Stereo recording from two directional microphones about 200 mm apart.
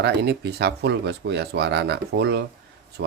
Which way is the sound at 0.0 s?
55° right (ahead or behind).